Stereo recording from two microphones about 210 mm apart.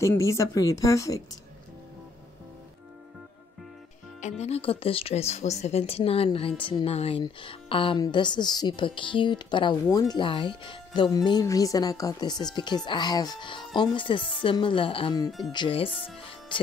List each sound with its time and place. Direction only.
0.0 s a woman's voice: 15° left (ahead or behind)
4.2 s speech: 30° left (ahead or behind)
16.3 s music: 25° left (ahead or behind)